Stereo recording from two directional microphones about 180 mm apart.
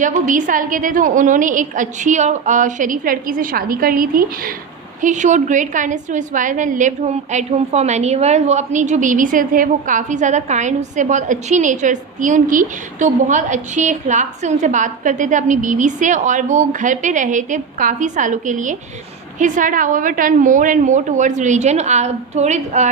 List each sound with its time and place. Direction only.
0.0 s a woman's voice: 45° right (ahead or behind)